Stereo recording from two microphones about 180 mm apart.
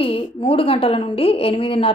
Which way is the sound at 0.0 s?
30° left (ahead or behind).